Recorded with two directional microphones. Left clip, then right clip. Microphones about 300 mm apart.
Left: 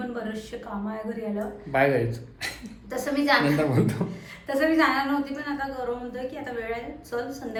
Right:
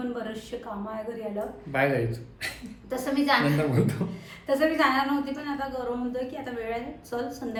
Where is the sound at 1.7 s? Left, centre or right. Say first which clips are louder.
Left 3 dB; centre.